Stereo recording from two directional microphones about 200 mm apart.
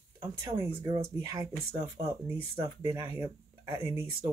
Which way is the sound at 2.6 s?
15° right (ahead or behind).